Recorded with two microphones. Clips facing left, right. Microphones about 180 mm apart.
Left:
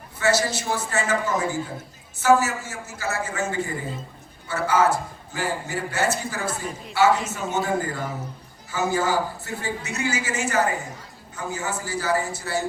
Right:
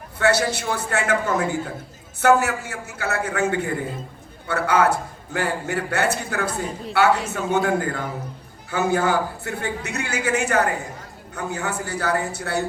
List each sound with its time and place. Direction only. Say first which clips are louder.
0.2 s a man's voice: right 2 dB; 60° right (ahead or behind)